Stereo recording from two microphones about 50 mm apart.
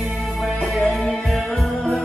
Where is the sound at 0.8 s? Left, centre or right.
Centre.